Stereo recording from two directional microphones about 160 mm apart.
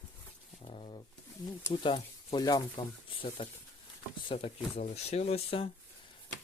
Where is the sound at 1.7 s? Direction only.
30° left (ahead or behind).